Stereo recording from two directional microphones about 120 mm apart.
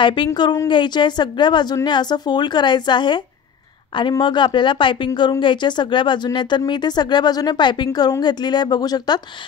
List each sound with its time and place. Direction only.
0.0 s speech: 40° left (ahead or behind)
4.2 s speech: 40° left (ahead or behind)